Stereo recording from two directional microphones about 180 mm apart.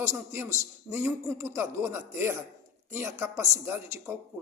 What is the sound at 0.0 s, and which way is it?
Speech, 15° right (ahead or behind).